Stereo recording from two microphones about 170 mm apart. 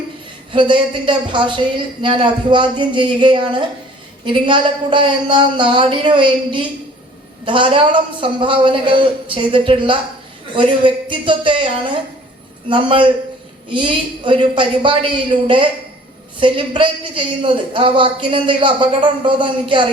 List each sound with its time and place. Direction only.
0.5 s a man's voice: 30° right (ahead or behind)